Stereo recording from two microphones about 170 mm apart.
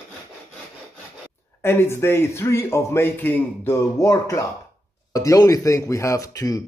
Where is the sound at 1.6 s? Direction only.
15° left (ahead or behind).